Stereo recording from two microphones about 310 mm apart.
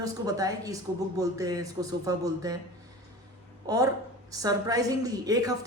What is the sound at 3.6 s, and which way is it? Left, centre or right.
A woman's voice, centre.